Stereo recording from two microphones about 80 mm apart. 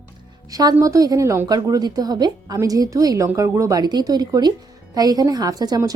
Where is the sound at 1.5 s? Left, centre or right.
Right.